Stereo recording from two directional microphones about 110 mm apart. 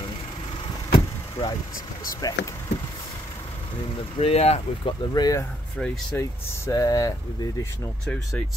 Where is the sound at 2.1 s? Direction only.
35° left (ahead or behind).